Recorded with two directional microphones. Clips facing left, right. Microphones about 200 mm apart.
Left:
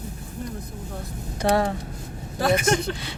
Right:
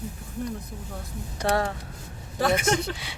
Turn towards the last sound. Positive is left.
turn(degrees=-10)  # may be behind; listen again after turning